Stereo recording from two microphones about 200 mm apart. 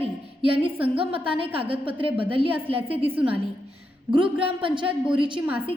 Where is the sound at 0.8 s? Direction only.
25° right (ahead or behind).